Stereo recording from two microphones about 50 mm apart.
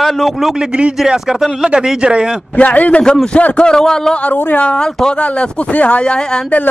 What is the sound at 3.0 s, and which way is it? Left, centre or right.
A man's voice, centre.